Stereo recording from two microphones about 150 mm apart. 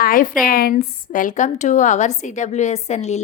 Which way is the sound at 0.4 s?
70° left (ahead or behind).